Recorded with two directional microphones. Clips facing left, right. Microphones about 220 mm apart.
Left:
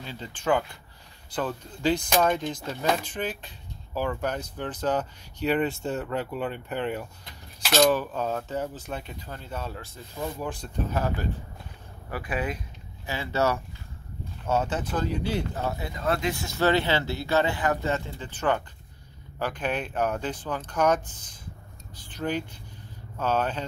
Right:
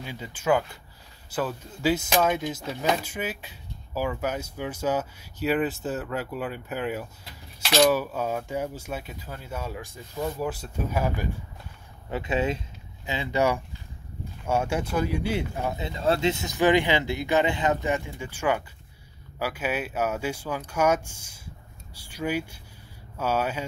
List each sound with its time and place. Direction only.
0.0 s speech: 10° right (ahead or behind)
12.1 s speech: 25° right (ahead or behind)